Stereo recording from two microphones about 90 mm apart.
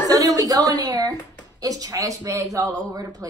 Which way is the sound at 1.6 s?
45° right (ahead or behind).